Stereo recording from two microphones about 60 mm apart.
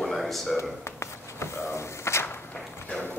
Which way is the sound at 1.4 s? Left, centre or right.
Left.